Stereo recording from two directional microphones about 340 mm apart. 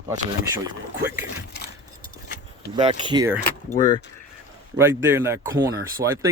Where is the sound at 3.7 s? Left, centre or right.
Centre.